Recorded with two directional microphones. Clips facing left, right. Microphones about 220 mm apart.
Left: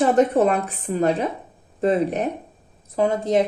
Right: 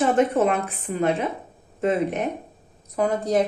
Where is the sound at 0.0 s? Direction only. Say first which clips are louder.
Left 2 dB; 35° left (ahead or behind).